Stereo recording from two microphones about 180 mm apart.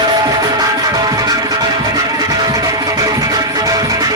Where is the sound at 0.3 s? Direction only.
20° right (ahead or behind).